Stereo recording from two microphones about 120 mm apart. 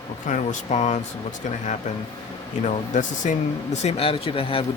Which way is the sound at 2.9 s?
80° left.